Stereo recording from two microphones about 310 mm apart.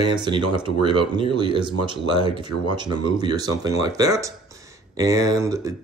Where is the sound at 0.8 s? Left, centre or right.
Centre.